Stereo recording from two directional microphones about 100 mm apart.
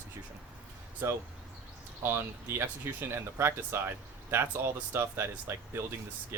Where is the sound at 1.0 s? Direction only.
25° right (ahead or behind).